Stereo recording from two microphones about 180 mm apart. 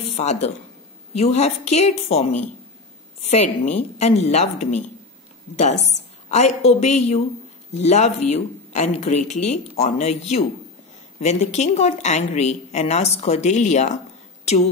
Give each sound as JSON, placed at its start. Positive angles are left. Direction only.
{"t": 0.1, "sound": "a woman's voice", "side_deg": 40}